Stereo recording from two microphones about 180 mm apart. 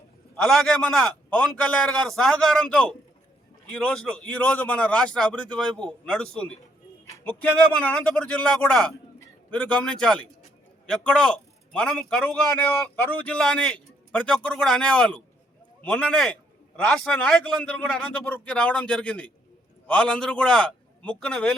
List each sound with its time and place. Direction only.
0.4 s a man's voice: centre (ahead or behind)